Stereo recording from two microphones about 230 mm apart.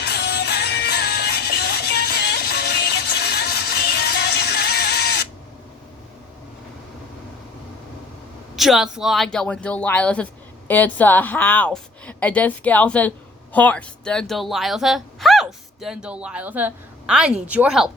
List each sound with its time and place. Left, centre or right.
0.0 s music: left
8.5 s a woman's voice: centre